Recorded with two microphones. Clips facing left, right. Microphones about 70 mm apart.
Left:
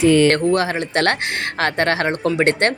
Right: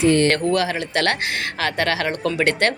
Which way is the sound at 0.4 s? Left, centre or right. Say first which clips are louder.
Left 2 dB; left.